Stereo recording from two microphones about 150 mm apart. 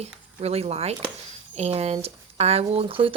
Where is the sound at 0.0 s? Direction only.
45° right (ahead or behind).